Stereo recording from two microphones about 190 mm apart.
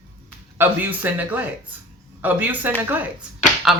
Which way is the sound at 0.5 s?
10° right (ahead or behind).